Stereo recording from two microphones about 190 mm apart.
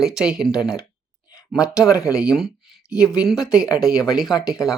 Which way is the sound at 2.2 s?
Centre (ahead or behind).